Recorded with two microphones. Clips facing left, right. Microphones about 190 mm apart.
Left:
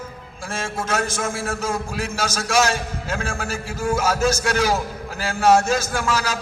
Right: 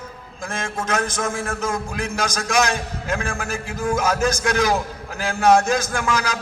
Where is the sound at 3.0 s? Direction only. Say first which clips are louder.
Right 3 dB; 15° right (ahead or behind).